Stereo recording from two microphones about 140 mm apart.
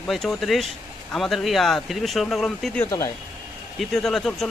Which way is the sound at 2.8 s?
20° left (ahead or behind).